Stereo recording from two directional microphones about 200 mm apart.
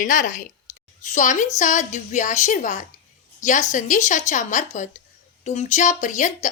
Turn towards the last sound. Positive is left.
turn(degrees=40)  # may be behind; listen again after turning